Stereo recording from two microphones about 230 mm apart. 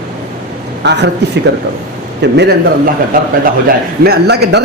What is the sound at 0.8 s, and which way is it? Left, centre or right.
Speech, right.